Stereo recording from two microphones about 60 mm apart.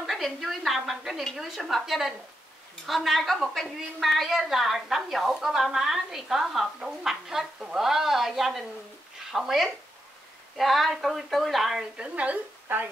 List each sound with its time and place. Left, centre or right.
0.0 s a woman's voice: centre
11.8 s a woman's voice: centre
12.6 s speech: right